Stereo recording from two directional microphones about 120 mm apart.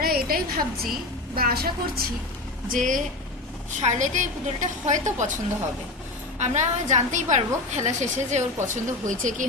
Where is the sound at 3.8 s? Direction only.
85° right.